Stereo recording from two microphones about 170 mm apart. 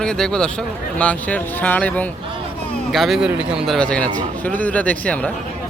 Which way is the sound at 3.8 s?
5° left (ahead or behind).